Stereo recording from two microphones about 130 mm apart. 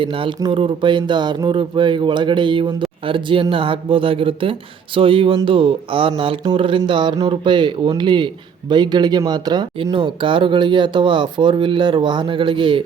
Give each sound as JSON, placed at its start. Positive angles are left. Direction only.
{"t": 0.0, "sound": "speech", "side_deg": -40}